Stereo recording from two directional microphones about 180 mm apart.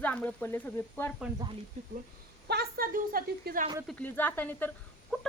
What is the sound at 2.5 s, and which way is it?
A woman's voice, 60° right (ahead or behind).